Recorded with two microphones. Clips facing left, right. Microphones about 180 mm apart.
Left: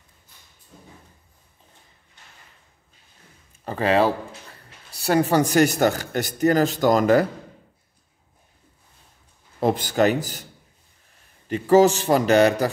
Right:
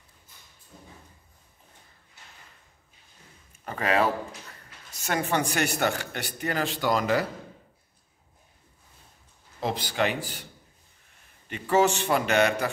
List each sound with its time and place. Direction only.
3.6 s a man's voice: 30° left (ahead or behind); by 7.2 s 45° left (ahead or behind)
9.6 s a man's voice: 50° left (ahead or behind)
11.4 s a man's voice: 40° left (ahead or behind)